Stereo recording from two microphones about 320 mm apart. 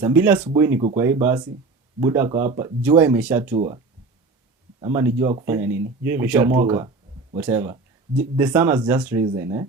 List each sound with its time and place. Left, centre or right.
0.0 s speech: centre
3.5 s speech: centre
4.8 s speech: centre